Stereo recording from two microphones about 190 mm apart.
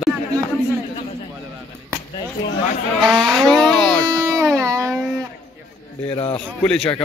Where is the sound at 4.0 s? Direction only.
15° right (ahead or behind).